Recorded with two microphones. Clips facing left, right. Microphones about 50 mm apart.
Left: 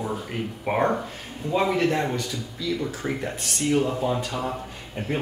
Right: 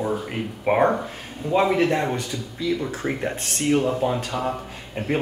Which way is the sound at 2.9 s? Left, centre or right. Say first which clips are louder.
Right 3 dB; centre.